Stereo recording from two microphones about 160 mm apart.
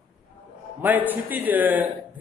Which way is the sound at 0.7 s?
10° right (ahead or behind).